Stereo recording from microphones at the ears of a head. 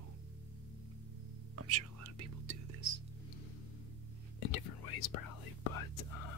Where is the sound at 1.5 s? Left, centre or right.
Right.